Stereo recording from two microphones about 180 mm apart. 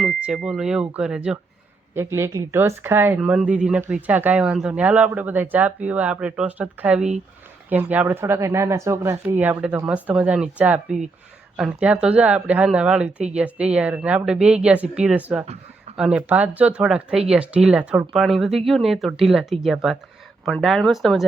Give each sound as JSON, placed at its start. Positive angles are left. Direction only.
{"t": 0.0, "sound": "speech", "side_deg": -5}
{"t": 2.0, "sound": "speech", "side_deg": -15}